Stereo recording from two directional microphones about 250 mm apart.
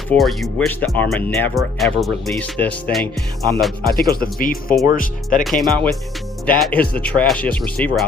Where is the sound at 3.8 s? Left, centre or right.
Left.